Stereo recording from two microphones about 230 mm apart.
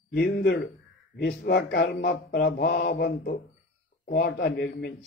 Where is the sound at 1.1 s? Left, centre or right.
Left.